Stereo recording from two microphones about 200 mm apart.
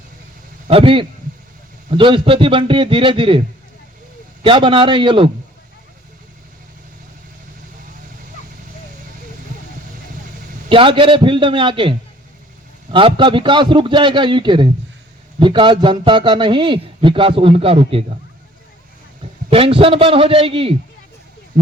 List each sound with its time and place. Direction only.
0.7 s a man's voice: 25° right (ahead or behind)
4.4 s a man's voice: 25° right (ahead or behind)
10.7 s a man's voice: 25° right (ahead or behind)
19.5 s a man's voice: 25° right (ahead or behind)